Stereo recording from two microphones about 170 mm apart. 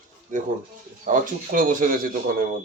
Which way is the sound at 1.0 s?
50° right (ahead or behind).